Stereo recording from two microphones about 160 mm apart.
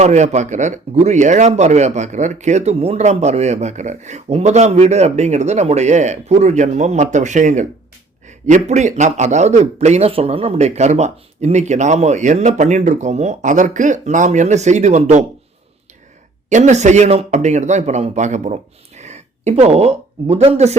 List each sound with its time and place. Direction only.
0.0 s speech: 45° right (ahead or behind)
16.5 s speech: 50° right (ahead or behind)